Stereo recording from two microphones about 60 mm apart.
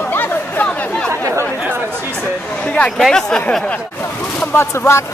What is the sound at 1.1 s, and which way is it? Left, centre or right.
Speech, right.